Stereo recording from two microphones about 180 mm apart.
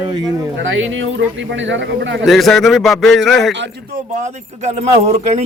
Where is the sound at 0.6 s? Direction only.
90° right.